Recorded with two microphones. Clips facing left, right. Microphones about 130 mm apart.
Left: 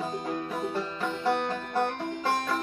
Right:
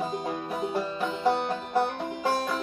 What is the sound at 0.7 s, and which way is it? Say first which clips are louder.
Music: right 2 dB; 15° right (ahead or behind).